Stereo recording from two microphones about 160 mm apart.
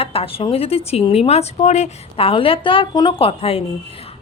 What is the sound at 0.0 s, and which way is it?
Speech, 35° left (ahead or behind).